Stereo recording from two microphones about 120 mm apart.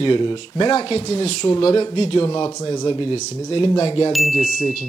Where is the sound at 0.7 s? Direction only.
55° left (ahead or behind).